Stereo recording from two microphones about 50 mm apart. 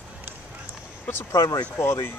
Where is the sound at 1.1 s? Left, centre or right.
Left.